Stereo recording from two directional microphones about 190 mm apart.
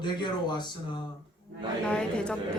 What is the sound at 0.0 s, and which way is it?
Speech, 25° left (ahead or behind).